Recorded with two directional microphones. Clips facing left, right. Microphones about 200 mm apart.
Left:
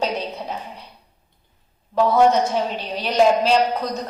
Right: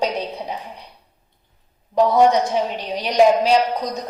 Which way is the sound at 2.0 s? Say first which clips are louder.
Right 1 dB; 15° right (ahead or behind).